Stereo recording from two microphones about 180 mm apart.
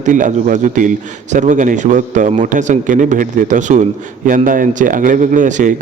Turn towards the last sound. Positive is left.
turn(degrees=-45)  # may be behind; listen again after turning